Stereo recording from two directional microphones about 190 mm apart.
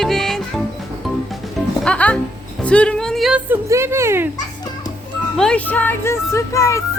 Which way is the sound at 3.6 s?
15° right (ahead or behind).